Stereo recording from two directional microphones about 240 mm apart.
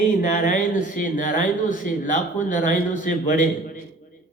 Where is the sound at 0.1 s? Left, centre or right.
Left.